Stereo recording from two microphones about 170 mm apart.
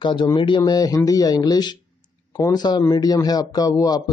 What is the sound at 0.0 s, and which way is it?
Speech, 30° left (ahead or behind).